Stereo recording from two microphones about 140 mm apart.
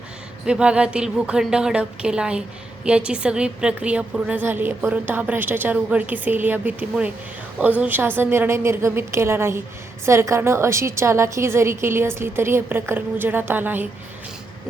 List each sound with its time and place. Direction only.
0.4 s a woman's voice: 5° right (ahead or behind)